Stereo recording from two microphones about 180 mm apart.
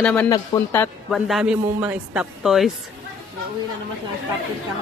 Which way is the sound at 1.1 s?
Centre (ahead or behind).